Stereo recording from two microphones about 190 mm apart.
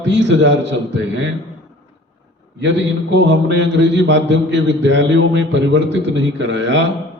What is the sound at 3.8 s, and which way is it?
A man's voice, 70° right (ahead or behind).